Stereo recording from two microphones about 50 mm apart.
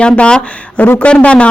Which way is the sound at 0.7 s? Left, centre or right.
Left.